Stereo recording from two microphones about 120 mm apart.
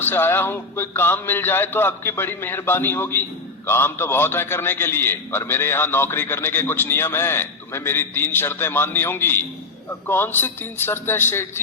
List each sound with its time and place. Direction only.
0.0 s a man's voice: 20° left (ahead or behind)